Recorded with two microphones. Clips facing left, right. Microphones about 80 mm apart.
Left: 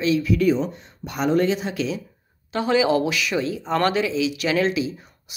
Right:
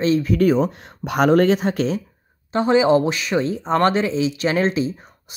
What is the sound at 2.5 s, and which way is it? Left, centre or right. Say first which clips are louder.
Speech: right 4 dB; right.